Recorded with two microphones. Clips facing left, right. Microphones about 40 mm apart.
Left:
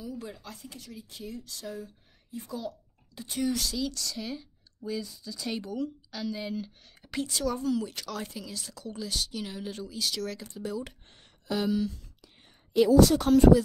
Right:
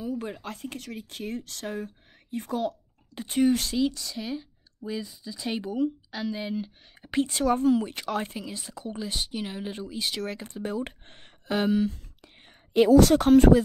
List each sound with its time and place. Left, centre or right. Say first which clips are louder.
0.0 s speech: right 7 dB; right
3.9 s speech: right 2 dB; centre; by 12.0 s right
12.9 s speech: right 4 dB; right